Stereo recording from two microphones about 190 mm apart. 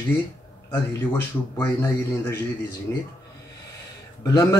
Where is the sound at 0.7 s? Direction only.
10° left (ahead or behind).